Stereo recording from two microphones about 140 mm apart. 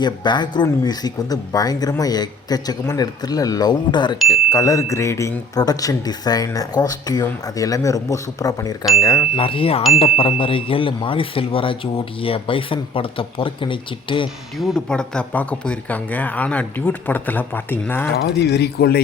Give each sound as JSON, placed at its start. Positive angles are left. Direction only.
{"t": 0.0, "sound": "speech", "side_deg": 30}
{"t": 9.3, "sound": "speech", "side_deg": 40}
{"t": 14.6, "sound": "speech", "side_deg": 0}
{"t": 18.8, "sound": "speech", "side_deg": 90}